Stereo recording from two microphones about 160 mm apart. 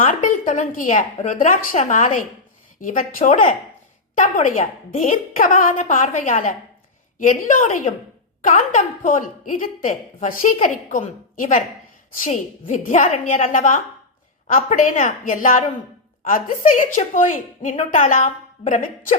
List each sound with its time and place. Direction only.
0.0 s a woman's voice: 55° left (ahead or behind)